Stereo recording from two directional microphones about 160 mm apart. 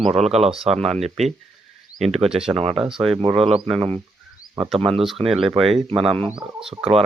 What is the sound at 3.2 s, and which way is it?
Speech, 35° right (ahead or behind).